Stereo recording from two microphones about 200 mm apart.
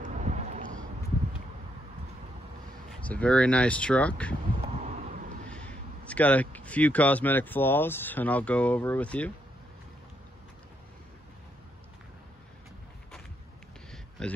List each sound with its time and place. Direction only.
0.0 s boat: 35° right (ahead or behind)
2.9 s speech: 5° left (ahead or behind)
4.6 s a sound: 35° right (ahead or behind)
5.5 s speech: 5° left (ahead or behind)
14.2 s speech: 5° left (ahead or behind)